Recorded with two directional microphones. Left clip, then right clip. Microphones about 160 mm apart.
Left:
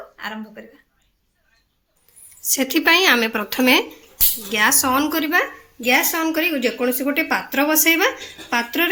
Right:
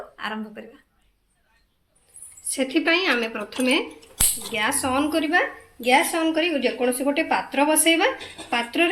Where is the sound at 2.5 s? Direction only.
60° left (ahead or behind).